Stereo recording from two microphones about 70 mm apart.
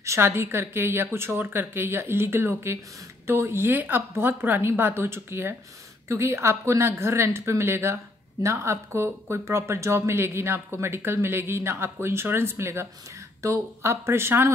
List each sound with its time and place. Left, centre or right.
0.0 s speech: right